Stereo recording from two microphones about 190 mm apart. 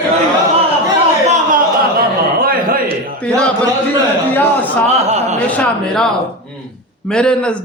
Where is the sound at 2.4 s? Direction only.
50° right (ahead or behind).